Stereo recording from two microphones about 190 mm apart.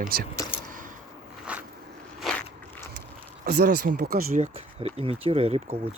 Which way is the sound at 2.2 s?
5° left (ahead or behind).